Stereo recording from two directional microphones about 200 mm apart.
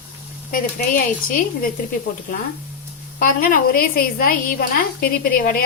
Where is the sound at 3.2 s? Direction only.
45° left (ahead or behind).